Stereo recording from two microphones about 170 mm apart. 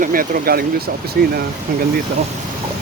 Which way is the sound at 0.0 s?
55° right (ahead or behind).